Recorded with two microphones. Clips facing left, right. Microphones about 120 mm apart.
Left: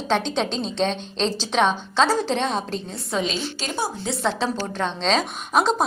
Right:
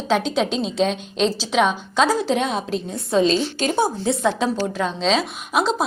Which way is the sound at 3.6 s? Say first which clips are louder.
Right 7 dB; 55° right (ahead or behind).